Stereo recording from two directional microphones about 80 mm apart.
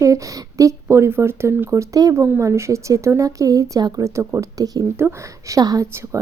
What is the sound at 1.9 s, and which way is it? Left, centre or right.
Speech, right.